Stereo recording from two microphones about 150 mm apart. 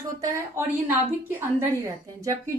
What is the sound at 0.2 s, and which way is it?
A woman's voice, 20° right (ahead or behind).